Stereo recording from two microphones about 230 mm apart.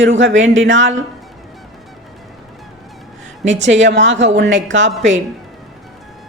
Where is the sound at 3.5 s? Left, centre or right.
Right.